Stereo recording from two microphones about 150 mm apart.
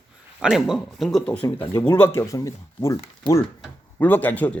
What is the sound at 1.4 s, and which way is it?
Speech, 30° left (ahead or behind).